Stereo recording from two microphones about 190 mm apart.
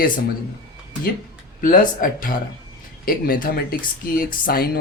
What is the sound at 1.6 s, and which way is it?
Speech, 45° left (ahead or behind).